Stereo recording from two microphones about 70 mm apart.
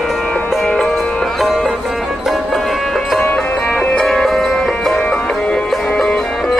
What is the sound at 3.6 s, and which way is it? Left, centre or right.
Music, centre.